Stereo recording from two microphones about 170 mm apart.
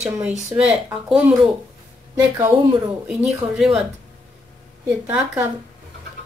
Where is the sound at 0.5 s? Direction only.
5° right (ahead or behind).